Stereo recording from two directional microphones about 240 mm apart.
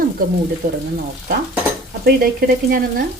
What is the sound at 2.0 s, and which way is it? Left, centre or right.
Speech, right.